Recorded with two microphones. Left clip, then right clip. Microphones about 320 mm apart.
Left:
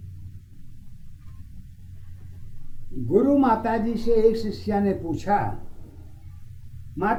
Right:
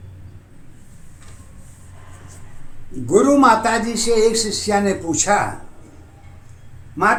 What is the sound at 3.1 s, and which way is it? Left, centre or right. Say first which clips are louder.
Speech: right 7 dB; centre.